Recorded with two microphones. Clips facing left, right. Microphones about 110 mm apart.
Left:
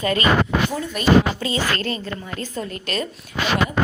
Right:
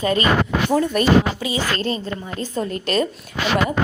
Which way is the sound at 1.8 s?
25° right (ahead or behind).